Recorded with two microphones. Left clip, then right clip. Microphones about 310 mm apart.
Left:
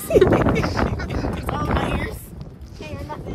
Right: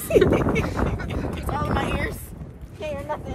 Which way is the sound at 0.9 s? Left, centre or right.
Left.